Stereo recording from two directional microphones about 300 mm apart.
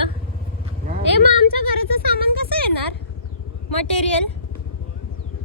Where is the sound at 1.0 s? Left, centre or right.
Left.